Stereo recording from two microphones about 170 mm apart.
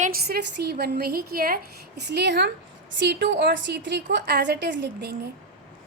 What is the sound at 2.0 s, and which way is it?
A woman's voice, 85° right.